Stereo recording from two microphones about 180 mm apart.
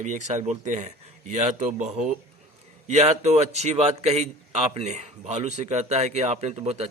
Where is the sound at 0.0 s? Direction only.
40° right (ahead or behind).